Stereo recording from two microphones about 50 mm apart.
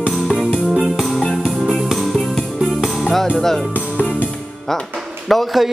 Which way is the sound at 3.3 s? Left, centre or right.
Centre.